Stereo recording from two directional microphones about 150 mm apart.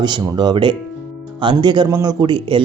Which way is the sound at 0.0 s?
30° right (ahead or behind).